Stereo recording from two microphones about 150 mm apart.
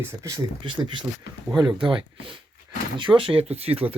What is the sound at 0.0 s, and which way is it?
Speech, 20° right (ahead or behind).